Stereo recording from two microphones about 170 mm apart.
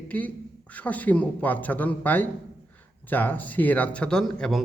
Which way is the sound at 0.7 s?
10° left (ahead or behind).